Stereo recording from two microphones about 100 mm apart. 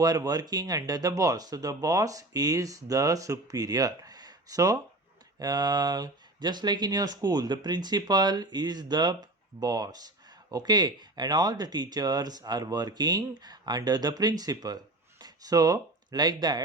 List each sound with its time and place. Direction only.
0.0 s speech: 40° right (ahead or behind)